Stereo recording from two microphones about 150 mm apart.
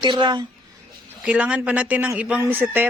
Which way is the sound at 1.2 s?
10° right (ahead or behind).